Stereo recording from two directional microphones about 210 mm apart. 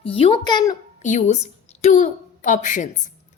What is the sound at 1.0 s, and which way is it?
A woman's voice, 35° left (ahead or behind).